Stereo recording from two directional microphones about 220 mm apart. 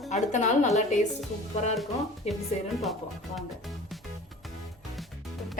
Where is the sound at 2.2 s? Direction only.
30° left (ahead or behind).